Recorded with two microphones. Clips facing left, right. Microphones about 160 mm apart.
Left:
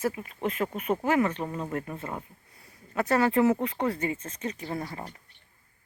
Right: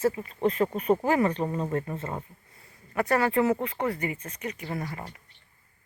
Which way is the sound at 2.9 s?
20° left (ahead or behind).